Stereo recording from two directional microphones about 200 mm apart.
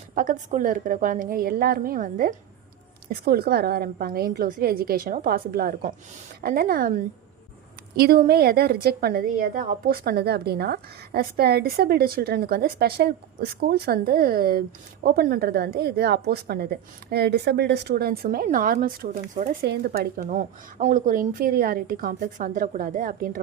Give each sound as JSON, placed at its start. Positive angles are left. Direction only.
{"t": 0.1, "sound": "a woman's voice", "side_deg": -40}
{"t": 19.6, "sound": "a woman's voice", "side_deg": -55}